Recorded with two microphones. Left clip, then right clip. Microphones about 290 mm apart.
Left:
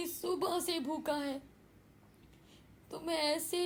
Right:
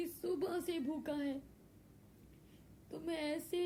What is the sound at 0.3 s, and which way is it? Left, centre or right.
A woman's voice, left.